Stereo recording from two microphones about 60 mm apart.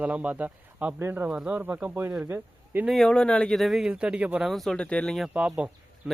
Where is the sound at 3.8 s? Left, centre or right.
Centre.